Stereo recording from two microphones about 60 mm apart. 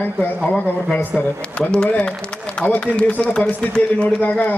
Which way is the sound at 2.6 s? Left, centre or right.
Left.